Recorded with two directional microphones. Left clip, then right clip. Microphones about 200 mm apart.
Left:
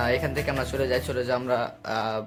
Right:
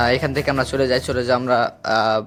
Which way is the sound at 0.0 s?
40° right (ahead or behind).